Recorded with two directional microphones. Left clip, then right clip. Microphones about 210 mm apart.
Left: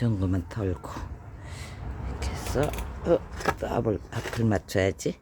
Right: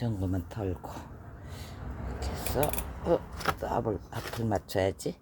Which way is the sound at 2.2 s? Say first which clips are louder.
Left 2 dB; 15° left (ahead or behind).